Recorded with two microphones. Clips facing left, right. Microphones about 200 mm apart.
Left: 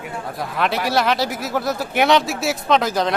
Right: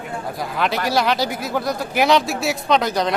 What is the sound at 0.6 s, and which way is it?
Speech, centre (ahead or behind).